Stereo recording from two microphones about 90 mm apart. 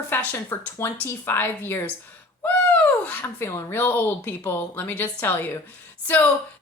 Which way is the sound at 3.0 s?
20° left (ahead or behind).